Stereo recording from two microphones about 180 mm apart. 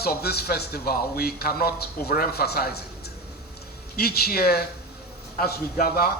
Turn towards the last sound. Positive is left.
turn(degrees=55)  # may be behind; listen again after turning